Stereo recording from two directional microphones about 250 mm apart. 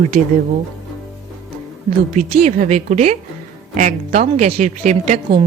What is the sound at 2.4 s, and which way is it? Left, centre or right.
A woman's voice, right.